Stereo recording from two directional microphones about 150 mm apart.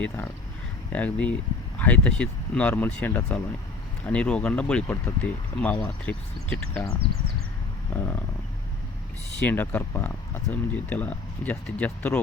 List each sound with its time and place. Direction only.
0.9 s speech: 10° left (ahead or behind)
7.9 s speech: 15° left (ahead or behind)
9.4 s speech: 10° left (ahead or behind)